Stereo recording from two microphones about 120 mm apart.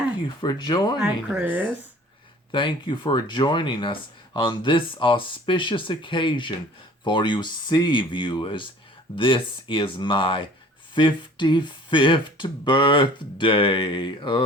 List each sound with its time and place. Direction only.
0.4 s speech: 35° left (ahead or behind)
1.0 s speech: 15° right (ahead or behind)
2.5 s speech: 40° left (ahead or behind)